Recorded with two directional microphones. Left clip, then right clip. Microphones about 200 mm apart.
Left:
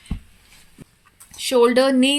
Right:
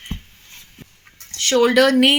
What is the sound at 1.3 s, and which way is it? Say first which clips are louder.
Speech: right 1 dB; 35° left (ahead or behind).